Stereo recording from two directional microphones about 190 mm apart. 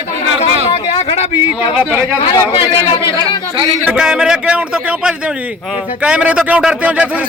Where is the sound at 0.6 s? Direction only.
30° left (ahead or behind).